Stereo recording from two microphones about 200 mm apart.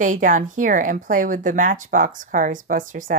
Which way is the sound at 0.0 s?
40° right (ahead or behind).